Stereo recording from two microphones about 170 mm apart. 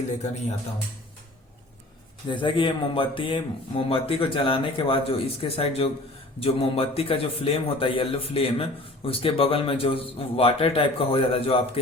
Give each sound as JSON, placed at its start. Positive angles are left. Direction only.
{"t": 2.3, "sound": "speech", "side_deg": 30}